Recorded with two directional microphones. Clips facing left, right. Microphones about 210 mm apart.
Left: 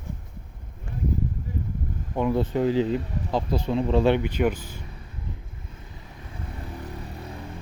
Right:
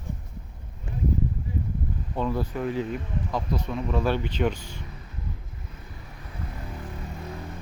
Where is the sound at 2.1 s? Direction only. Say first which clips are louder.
Left 5 dB; 20° left (ahead or behind).